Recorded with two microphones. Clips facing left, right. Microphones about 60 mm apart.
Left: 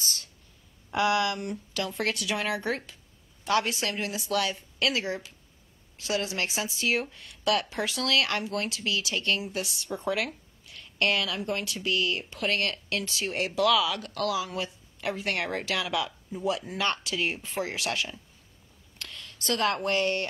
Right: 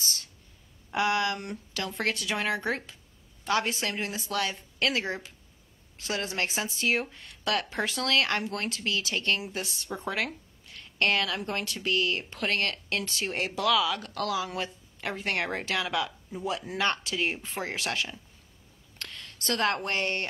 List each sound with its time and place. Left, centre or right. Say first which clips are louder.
0.9 s a woman's voice: left 1 dB; right
13.3 s a woman's voice: left 2 dB; right